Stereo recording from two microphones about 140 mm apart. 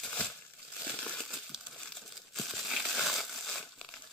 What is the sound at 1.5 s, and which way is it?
Crumpling, centre (ahead or behind).